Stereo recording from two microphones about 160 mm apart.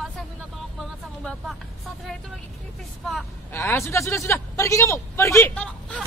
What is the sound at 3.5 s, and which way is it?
A man's voice, 15° left (ahead or behind).